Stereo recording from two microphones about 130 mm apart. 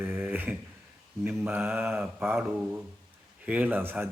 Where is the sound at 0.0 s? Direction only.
15° right (ahead or behind).